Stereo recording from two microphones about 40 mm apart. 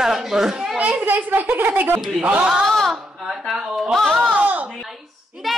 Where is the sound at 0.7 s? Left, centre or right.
Right.